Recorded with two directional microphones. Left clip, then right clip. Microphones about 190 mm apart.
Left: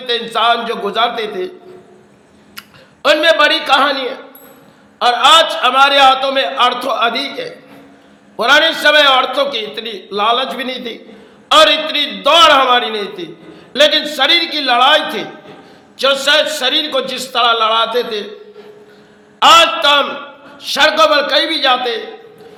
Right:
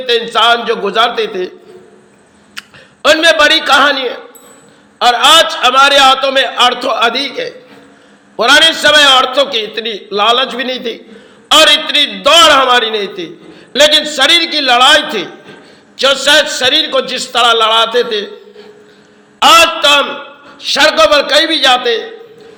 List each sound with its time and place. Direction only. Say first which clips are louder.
0.0 s a man's voice: right 4 dB; 15° right (ahead or behind)
2.6 s a man's voice: right 5 dB; 15° right (ahead or behind)
19.4 s a man's voice: right 2 dB; 15° right (ahead or behind)